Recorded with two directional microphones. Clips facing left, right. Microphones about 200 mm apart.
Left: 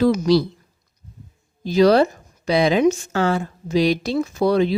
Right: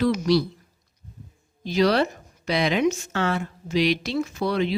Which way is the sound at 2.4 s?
35° left (ahead or behind).